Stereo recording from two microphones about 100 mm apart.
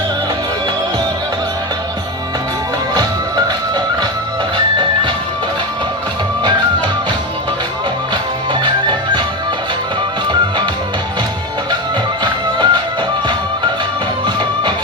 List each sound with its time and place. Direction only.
2.9 s music: 45° right (ahead or behind)
4.5 s music: 55° right (ahead or behind)
8.6 s music: 50° right (ahead or behind)
12.2 s music: 45° right (ahead or behind)
14.3 s music: 50° right (ahead or behind)